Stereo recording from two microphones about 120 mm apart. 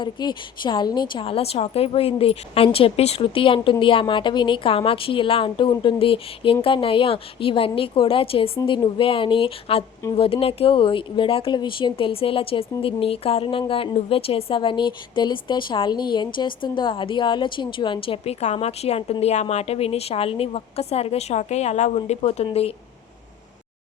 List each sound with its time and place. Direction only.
0.0 s a woman's voice: 40° left (ahead or behind); by 22.4 s 65° left (ahead or behind)